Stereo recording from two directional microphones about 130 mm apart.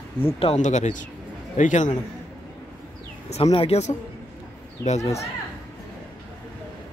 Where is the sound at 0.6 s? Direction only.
65° left (ahead or behind).